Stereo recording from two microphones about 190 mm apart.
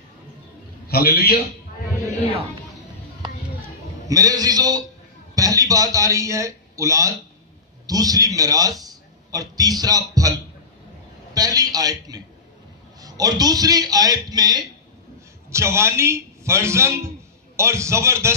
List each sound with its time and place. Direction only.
0.8 s a man's voice: 55° left (ahead or behind)
4.1 s a man's voice: 20° right (ahead or behind)
11.3 s a man's voice: 20° right (ahead or behind)